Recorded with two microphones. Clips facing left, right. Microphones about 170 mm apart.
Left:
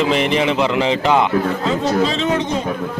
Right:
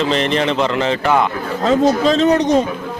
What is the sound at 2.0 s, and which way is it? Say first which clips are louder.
Speech: right 5 dB; 40° right (ahead or behind).